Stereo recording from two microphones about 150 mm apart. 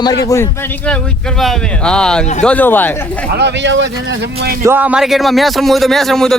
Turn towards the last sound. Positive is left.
turn(degrees=5)  # may be behind; listen again after turning